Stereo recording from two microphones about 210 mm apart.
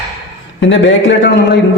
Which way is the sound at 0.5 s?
60° left (ahead or behind).